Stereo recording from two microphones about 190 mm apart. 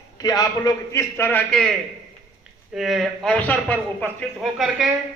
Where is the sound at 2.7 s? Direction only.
Centre (ahead or behind).